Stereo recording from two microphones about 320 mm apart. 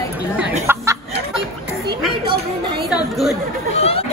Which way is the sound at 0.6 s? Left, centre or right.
Centre.